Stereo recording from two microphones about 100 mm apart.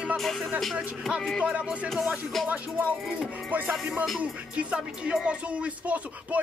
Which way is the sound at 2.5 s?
15° right (ahead or behind).